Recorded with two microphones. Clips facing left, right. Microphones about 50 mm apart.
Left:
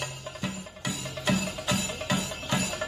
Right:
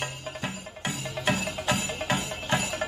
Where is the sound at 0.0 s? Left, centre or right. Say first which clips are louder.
Right 2 dB; right.